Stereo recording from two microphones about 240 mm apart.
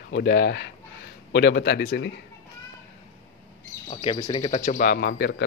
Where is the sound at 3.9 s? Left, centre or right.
Left.